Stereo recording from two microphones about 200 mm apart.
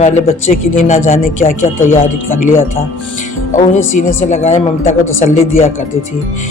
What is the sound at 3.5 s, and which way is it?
Speech, 35° left (ahead or behind).